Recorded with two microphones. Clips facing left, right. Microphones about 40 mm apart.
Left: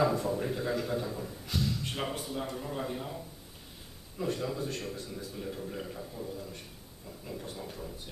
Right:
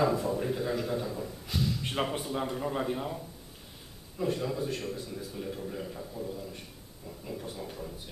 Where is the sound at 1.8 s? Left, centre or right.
Right.